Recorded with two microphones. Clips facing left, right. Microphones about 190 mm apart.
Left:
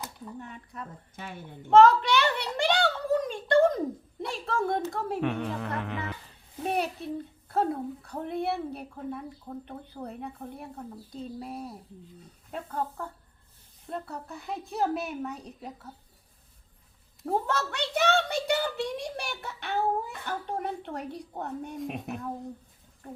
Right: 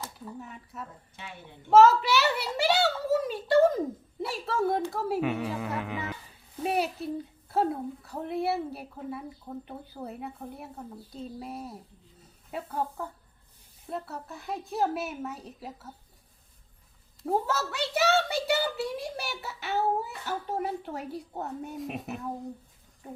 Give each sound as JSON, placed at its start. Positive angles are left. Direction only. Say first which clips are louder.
{"t": 0.3, "sound": "a woman's voice", "louder": "even", "side_deg": -5}
{"t": 1.1, "sound": "speech", "louder": "left 4 dB", "side_deg": 45}
{"t": 1.7, "sound": "a sound", "louder": "even", "side_deg": -5}
{"t": 4.2, "sound": "a woman's voice", "louder": "right 2 dB", "side_deg": -5}
{"t": 17.2, "sound": "a woman's voice", "louder": "even", "side_deg": -5}